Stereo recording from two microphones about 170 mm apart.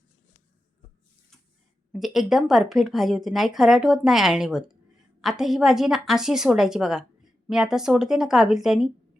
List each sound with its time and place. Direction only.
1.9 s speech: centre (ahead or behind)